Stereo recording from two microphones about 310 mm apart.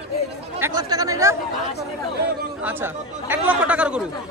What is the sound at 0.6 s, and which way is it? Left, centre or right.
Speech, centre.